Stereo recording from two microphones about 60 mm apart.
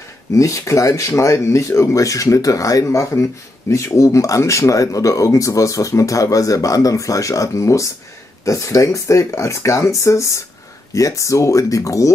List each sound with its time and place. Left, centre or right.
0.3 s speech: left